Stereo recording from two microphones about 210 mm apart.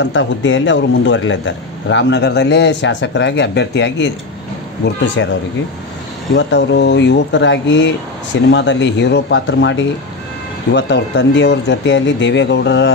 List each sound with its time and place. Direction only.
0.0 s a man's voice: 60° left (ahead or behind)
6.3 s a man's voice: 55° left (ahead or behind)